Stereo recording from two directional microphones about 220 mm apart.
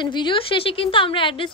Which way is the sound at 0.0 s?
20° left (ahead or behind).